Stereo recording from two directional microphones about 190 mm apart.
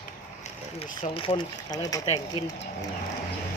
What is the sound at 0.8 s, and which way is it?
Speech, 30° left (ahead or behind).